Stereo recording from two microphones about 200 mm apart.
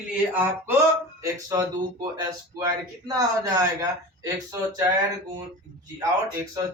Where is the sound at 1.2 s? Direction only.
15° right (ahead or behind).